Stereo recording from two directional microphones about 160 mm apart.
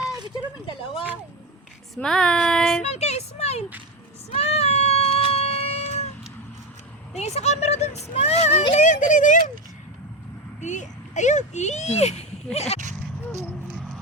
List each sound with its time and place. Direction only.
2.0 s speech: 5° left (ahead or behind)
2.8 s speech: 40° left (ahead or behind)
4.4 s cat: 40° left (ahead or behind)
7.2 s speech: 40° left (ahead or behind)
10.6 s speech: 50° left (ahead or behind)
13.5 s a sound: 5° right (ahead or behind)